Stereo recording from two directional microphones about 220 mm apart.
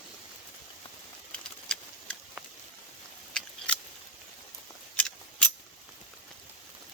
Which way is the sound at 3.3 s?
5° left (ahead or behind).